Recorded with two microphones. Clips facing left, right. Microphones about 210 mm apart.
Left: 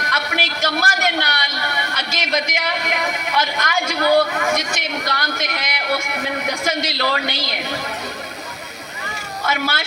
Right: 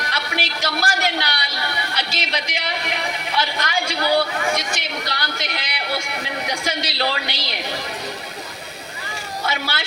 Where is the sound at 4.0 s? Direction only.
50° left (ahead or behind).